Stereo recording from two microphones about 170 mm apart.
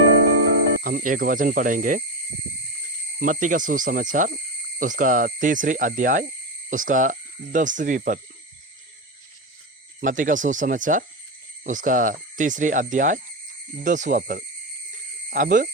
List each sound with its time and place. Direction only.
0.9 s speech: 50° right (ahead or behind)
3.2 s speech: 50° right (ahead or behind)
10.0 s speech: 50° right (ahead or behind)